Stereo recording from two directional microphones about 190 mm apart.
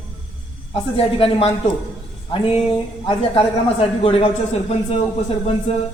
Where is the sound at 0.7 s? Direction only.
30° left (ahead or behind).